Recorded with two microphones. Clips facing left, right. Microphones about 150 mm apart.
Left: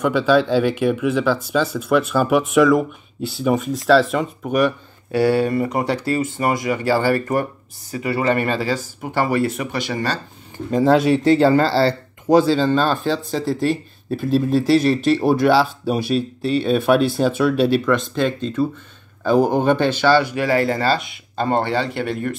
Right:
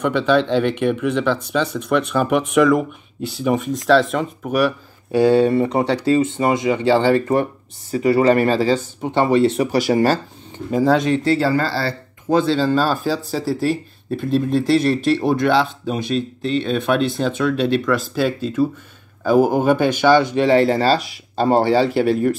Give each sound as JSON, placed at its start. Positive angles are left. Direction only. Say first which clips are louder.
{"t": 0.0, "sound": "speech", "louder": "left 1 dB", "side_deg": 5}
{"t": 5.1, "sound": "speech", "louder": "right 3 dB", "side_deg": -20}
{"t": 10.7, "sound": "speech", "louder": "left 1 dB", "side_deg": 0}
{"t": 11.3, "sound": "speech", "louder": "left 4 dB", "side_deg": 25}
{"t": 12.3, "sound": "speech", "louder": "left 3 dB", "side_deg": 10}
{"t": 12.5, "sound": "speech", "louder": "even", "side_deg": -5}
{"t": 17.9, "sound": "speech", "louder": "even", "side_deg": -5}
{"t": 21.6, "sound": "speech", "louder": "right 6 dB", "side_deg": -5}